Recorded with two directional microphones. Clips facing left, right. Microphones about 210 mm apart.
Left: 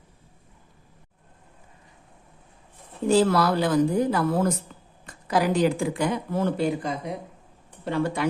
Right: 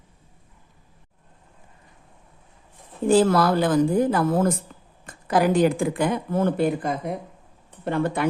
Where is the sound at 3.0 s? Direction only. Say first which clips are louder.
Right 2 dB; 50° right (ahead or behind).